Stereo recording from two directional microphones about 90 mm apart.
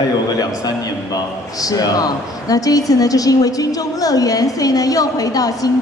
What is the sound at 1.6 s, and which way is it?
A woman's voice, 45° left (ahead or behind).